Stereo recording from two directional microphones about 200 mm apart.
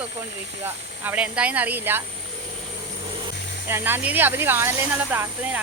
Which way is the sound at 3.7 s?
10° right (ahead or behind).